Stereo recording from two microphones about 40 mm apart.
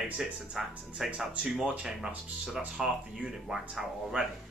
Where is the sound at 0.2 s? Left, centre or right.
Centre.